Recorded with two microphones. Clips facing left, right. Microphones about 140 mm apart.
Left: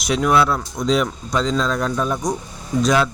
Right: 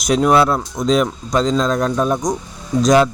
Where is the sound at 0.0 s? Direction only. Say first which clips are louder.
Right 4 dB; 40° right (ahead or behind).